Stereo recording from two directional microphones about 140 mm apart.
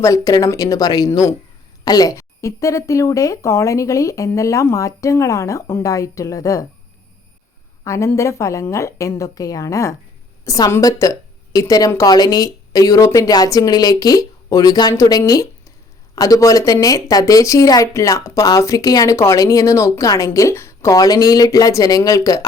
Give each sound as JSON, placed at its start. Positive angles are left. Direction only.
{"t": 0.0, "sound": "speech", "side_deg": 25}
{"t": 7.9, "sound": "speech", "side_deg": 20}